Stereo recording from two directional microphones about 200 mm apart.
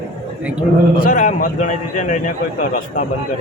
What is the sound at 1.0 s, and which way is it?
A man's voice, 40° left (ahead or behind).